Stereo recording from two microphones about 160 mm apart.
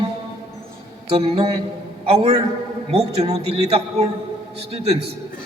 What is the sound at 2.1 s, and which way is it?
A man's voice, 40° right (ahead or behind).